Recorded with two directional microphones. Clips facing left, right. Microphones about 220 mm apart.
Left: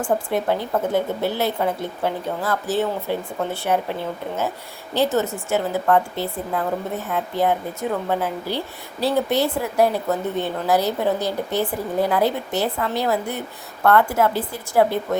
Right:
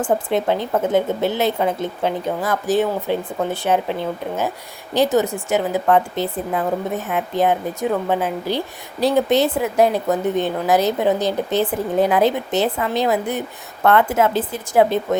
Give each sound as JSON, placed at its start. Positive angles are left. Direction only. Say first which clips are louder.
{"t": 0.0, "sound": "speech", "louder": "right 3 dB", "side_deg": -20}
{"t": 5.1, "sound": "speech", "louder": "right 3 dB", "side_deg": -15}